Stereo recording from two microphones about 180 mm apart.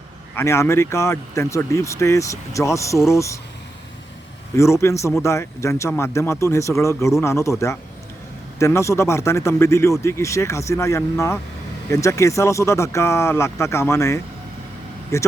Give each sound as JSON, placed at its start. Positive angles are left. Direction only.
{"t": 0.3, "sound": "speech", "side_deg": 15}
{"t": 4.5, "sound": "speech", "side_deg": 15}
{"t": 8.5, "sound": "speech", "side_deg": 15}